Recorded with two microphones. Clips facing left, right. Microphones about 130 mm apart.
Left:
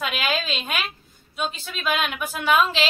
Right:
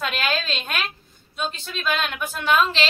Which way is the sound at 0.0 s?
5° left (ahead or behind).